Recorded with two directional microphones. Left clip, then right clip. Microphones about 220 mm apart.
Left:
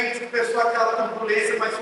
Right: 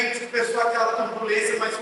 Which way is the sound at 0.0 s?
5° left (ahead or behind).